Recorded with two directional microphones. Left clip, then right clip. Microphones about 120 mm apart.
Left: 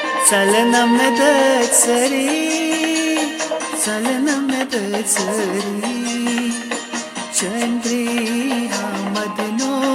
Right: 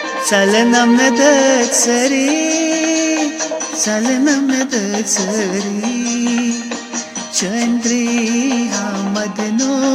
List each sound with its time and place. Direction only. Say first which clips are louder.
0.3 s speech: right 3 dB; 20° right (ahead or behind)
7.9 s speech: right 3 dB; 15° right (ahead or behind)